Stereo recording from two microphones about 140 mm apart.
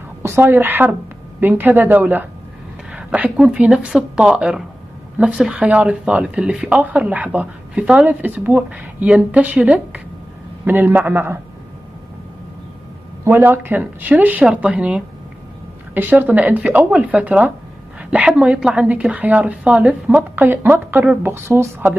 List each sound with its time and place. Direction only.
0.2 s speech: 15° right (ahead or behind)
13.2 s speech: 15° right (ahead or behind)